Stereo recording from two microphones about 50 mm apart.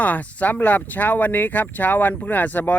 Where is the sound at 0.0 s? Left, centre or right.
Left.